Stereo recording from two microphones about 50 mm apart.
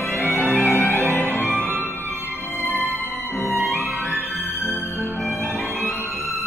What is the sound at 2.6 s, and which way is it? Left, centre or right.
Music, left.